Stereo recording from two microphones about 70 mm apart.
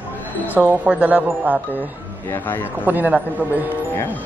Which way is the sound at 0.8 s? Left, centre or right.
Right.